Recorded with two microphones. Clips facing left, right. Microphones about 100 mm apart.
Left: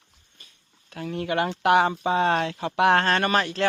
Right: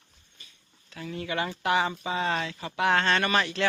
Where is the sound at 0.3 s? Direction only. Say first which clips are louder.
Even; 50° left (ahead or behind).